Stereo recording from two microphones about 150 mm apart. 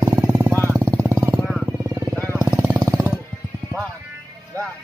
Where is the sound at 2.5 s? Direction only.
15° right (ahead or behind).